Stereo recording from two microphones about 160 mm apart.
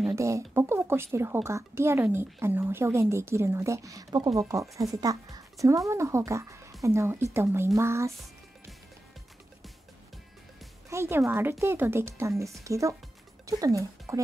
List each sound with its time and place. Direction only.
0.1 s speech: 20° right (ahead or behind)
10.9 s speech: 15° right (ahead or behind)